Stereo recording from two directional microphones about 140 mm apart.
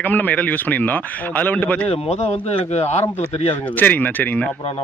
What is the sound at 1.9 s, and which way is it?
Speech, 50° left (ahead or behind).